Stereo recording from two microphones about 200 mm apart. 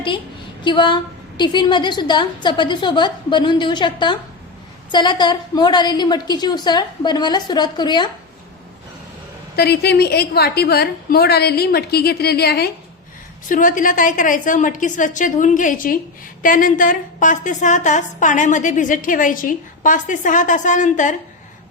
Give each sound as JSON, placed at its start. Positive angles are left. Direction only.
{"t": 0.6, "sound": "a woman's voice", "side_deg": 25}
{"t": 9.6, "sound": "a woman's voice", "side_deg": 55}
{"t": 13.5, "sound": "a woman's voice", "side_deg": 40}